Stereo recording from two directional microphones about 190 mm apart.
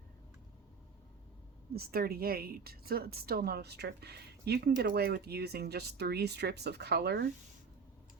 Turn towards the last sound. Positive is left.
turn(degrees=-60)  # may be behind; listen again after turning